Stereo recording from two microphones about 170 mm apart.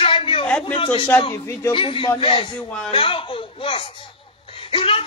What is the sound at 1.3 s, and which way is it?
Speech, 15° left (ahead or behind).